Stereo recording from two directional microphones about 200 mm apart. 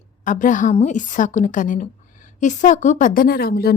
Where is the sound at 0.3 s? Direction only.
40° left (ahead or behind).